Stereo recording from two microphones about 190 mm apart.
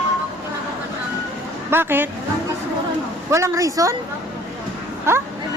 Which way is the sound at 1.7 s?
10° right (ahead or behind).